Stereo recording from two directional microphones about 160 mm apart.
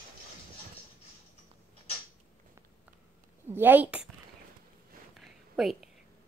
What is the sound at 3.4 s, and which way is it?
Speech, 15° right (ahead or behind).